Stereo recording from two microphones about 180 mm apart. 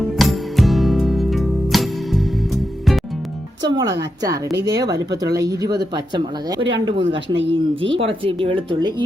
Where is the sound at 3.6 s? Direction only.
20° right (ahead or behind).